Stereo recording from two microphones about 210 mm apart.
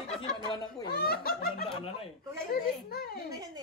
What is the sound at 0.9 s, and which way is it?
Speech, 50° left (ahead or behind).